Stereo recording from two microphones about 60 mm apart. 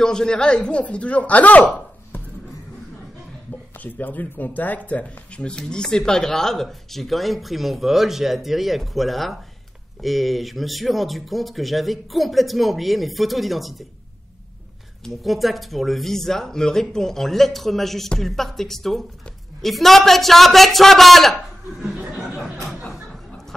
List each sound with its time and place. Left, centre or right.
0.0 s speech: centre; by 1.7 s left
2.1 s music: left
3.7 s speech: left; by 13.8 s centre
15.0 s speech: centre
22.3 s a sound: centre